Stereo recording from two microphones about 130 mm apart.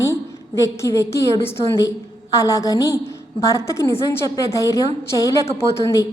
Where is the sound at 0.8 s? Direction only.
25° left (ahead or behind).